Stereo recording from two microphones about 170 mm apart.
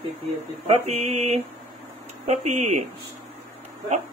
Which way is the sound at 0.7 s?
40° right (ahead or behind).